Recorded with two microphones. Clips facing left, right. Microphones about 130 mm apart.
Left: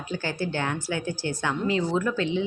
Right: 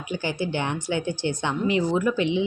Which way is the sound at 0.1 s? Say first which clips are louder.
Right 2 dB; 15° right (ahead or behind).